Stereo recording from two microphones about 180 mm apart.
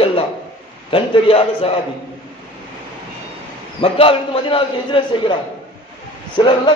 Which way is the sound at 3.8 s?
30° left (ahead or behind).